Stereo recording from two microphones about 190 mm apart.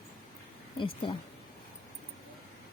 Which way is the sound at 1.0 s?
25° left (ahead or behind).